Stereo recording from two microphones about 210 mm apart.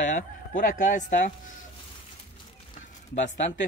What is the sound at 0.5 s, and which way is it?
Speech, 40° left (ahead or behind).